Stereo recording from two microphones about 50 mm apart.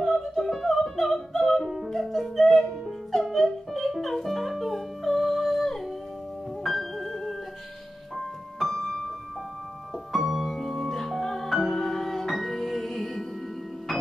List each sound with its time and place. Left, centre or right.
0.0 s music: centre
10.1 s music: centre